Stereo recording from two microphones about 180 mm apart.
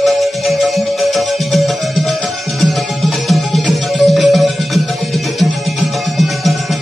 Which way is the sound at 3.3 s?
Centre (ahead or behind).